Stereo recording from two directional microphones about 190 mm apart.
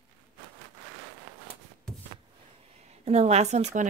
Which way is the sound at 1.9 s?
5° left (ahead or behind).